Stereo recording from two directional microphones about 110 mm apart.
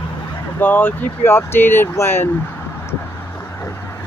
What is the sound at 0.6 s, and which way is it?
Speech, 15° left (ahead or behind).